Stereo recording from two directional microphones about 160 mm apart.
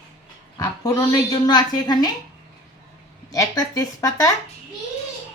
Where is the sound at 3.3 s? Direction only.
20° left (ahead or behind).